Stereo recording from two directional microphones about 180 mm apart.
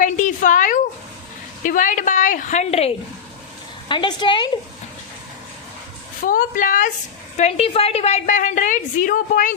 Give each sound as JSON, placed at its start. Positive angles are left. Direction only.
{"t": 0.0, "sound": "a sound", "side_deg": 45}
{"t": 1.6, "sound": "a woman's voice", "side_deg": 45}
{"t": 6.2, "sound": "a woman's voice", "side_deg": 50}
{"t": 7.3, "sound": "a woman's voice", "side_deg": 35}